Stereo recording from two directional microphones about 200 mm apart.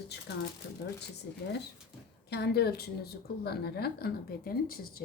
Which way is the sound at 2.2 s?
55° left (ahead or behind).